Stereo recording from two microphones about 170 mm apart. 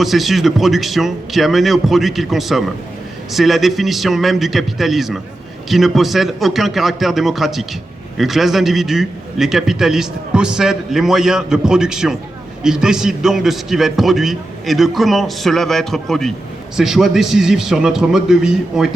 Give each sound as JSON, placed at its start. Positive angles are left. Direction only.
{"t": 0.0, "sound": "a man's voice", "side_deg": 0}